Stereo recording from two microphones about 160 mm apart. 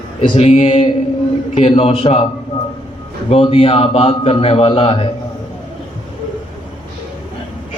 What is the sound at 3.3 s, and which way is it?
A man's voice, 35° left (ahead or behind).